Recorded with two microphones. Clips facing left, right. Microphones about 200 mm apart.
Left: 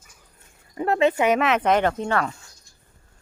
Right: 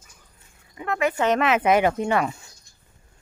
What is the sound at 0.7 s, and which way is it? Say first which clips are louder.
Speech: left 5 dB; 35° left (ahead or behind).